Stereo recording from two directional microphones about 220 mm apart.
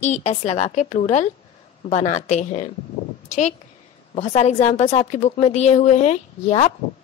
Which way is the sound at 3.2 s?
35° left (ahead or behind).